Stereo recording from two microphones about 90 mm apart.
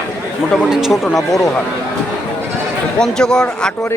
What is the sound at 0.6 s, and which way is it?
Speech, 5° right (ahead or behind).